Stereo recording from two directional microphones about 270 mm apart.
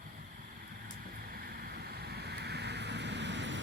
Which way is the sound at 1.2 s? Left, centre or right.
Right.